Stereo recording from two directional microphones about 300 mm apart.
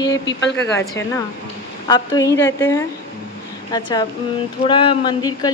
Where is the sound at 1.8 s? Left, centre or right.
Centre.